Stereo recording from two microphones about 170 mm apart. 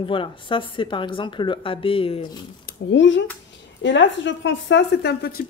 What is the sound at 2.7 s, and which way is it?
A woman's voice, 90° left.